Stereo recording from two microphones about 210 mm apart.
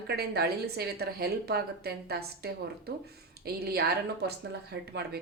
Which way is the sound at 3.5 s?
45° right (ahead or behind).